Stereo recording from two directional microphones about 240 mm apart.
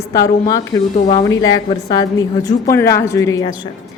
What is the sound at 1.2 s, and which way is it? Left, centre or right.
A woman's voice, centre.